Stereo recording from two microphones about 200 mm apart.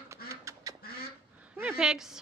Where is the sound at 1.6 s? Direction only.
5° right (ahead or behind).